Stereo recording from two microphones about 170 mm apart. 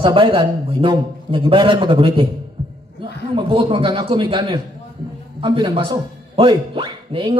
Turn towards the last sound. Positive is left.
turn(degrees=-30)  # may be behind; listen again after turning